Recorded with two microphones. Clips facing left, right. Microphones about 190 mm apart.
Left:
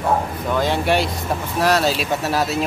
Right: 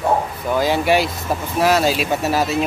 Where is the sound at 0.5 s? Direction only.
5° right (ahead or behind).